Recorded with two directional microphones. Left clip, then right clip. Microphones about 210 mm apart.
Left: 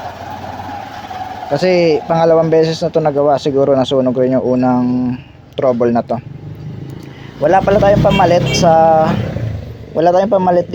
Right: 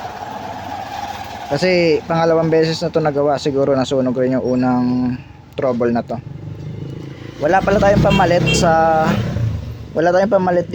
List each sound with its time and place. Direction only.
1.5 s speech: centre (ahead or behind)
7.4 s speech: 5° left (ahead or behind)